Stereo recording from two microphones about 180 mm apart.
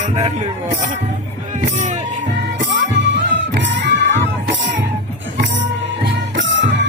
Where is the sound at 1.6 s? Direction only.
40° right (ahead or behind).